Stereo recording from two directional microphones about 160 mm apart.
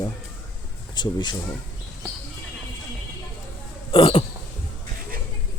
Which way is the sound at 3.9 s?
35° left (ahead or behind).